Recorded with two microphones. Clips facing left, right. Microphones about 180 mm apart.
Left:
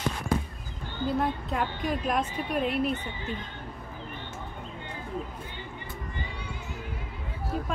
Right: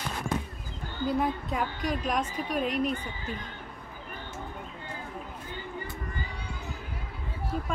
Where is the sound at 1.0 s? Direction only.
Centre (ahead or behind).